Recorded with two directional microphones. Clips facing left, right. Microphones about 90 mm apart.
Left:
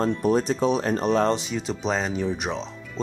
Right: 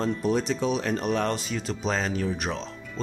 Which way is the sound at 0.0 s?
40° left (ahead or behind).